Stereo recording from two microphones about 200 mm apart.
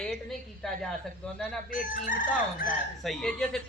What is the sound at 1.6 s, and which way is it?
Fowl, 45° left (ahead or behind).